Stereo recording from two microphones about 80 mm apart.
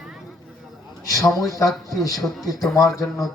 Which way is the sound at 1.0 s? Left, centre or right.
Left.